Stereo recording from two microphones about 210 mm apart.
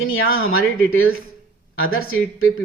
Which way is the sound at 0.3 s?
75° left (ahead or behind).